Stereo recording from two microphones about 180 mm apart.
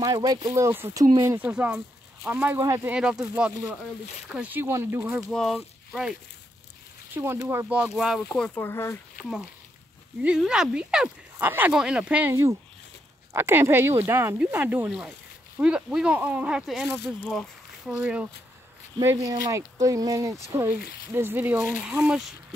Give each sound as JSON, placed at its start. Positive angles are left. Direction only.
{"t": 0.0, "sound": "speech", "side_deg": -20}
{"t": 2.6, "sound": "speech", "side_deg": -20}
{"t": 2.9, "sound": "speech", "side_deg": -5}
{"t": 5.3, "sound": "speech", "side_deg": 0}
{"t": 7.4, "sound": "speech", "side_deg": -10}
{"t": 9.2, "sound": "speech", "side_deg": -5}
{"t": 19.2, "sound": "speech", "side_deg": -20}